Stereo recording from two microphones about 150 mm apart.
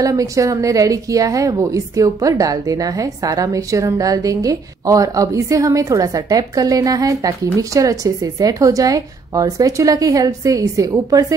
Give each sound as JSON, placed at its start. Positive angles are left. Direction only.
{"t": 0.0, "sound": "a woman's voice", "side_deg": -20}